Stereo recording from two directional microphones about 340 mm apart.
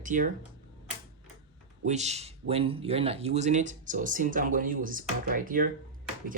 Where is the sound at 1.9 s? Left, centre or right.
Centre.